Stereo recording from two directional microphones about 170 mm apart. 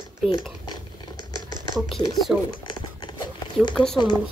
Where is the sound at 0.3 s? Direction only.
25° left (ahead or behind).